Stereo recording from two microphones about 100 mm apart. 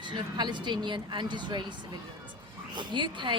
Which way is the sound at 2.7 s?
50° right (ahead or behind).